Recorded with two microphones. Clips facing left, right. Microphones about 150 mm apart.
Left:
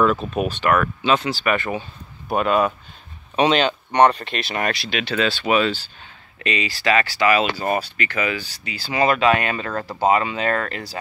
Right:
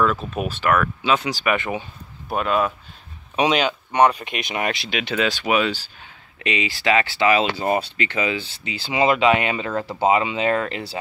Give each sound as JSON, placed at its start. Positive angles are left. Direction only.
{"t": 0.0, "sound": "speech", "side_deg": 0}
{"t": 2.2, "sound": "speech", "side_deg": 0}